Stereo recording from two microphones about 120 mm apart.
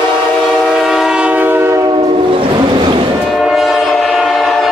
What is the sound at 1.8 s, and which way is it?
Train, 30° right (ahead or behind).